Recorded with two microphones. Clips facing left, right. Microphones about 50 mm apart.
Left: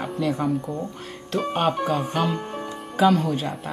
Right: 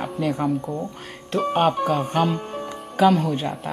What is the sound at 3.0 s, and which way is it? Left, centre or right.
Speech, centre.